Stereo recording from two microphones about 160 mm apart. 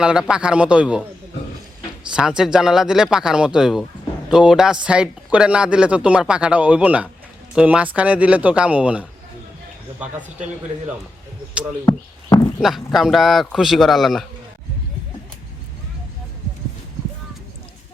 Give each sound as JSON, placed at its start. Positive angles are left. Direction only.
{"t": 0.0, "sound": "speech", "side_deg": -5}
{"t": 2.1, "sound": "speech", "side_deg": -5}
{"t": 11.9, "sound": "speech", "side_deg": 25}
{"t": 12.5, "sound": "speech", "side_deg": 0}